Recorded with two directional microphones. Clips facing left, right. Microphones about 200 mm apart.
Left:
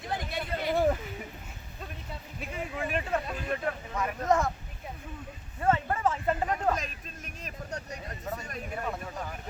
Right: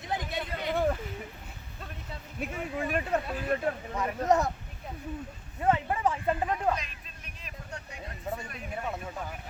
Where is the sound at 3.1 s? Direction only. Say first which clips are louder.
Right 2 dB; 35° right (ahead or behind).